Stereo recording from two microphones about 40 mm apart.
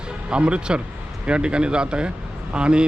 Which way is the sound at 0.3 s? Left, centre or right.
Right.